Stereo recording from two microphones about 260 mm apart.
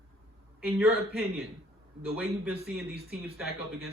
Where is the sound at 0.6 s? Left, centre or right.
Centre.